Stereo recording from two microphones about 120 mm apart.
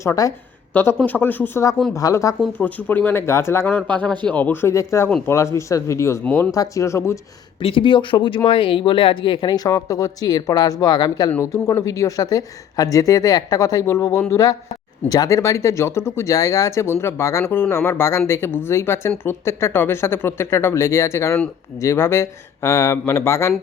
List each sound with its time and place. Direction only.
0.0 s a woman's voice: 25° left (ahead or behind)
0.7 s speech: 15° left (ahead or behind)
2.0 s a woman's voice: 30° left (ahead or behind)
2.6 s speech: 15° left (ahead or behind)
4.7 s a woman's voice: 25° left (ahead or behind)
6.5 s a woman's voice: 25° left (ahead or behind)
7.6 s a woman's voice: 45° left (ahead or behind); by 23.6 s 25° left (ahead or behind)